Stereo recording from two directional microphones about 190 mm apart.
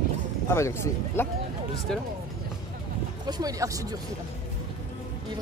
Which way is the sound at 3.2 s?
20° right (ahead or behind).